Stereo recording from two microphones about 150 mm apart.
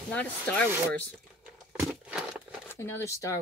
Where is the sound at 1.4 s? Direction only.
10° right (ahead or behind).